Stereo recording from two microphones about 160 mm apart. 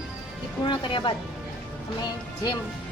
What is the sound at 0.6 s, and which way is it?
Speech, 30° left (ahead or behind).